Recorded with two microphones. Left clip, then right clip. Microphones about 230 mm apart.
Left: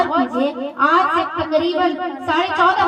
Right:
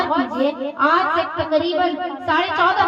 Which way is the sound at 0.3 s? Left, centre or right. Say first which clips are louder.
Left 1 dB; left.